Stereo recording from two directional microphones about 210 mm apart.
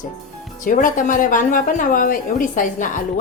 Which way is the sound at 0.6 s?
40° left (ahead or behind).